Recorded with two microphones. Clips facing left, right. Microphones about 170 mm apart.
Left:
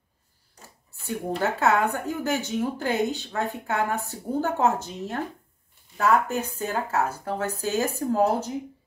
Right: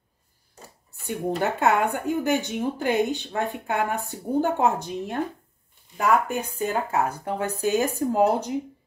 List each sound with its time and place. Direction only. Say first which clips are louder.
1.0 s speech: right 1 dB; 15° right (ahead or behind)